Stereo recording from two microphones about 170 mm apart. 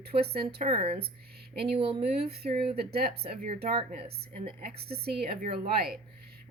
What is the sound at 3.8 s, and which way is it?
A woman's voice, 70° right (ahead or behind).